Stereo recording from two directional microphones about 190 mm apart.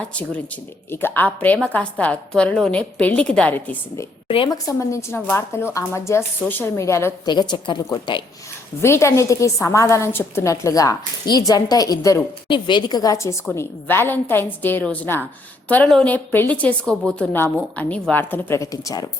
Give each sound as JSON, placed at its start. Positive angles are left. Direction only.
{"t": 0.1, "sound": "a woman's voice", "side_deg": 5}
{"t": 4.3, "sound": "a woman's voice", "side_deg": 25}